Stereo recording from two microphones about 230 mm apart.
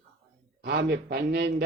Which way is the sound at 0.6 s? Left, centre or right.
Right.